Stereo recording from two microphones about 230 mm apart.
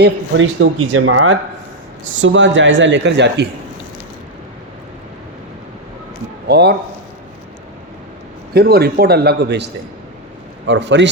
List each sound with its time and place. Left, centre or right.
0.0 s a man's voice: right
6.5 s a man's voice: right
8.5 s a man's voice: right
10.7 s a man's voice: right